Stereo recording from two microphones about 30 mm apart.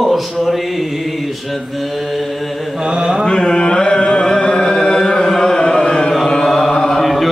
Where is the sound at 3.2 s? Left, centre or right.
Left.